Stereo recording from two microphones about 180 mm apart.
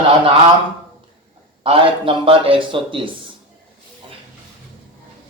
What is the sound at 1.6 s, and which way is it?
A man's voice, 30° right (ahead or behind).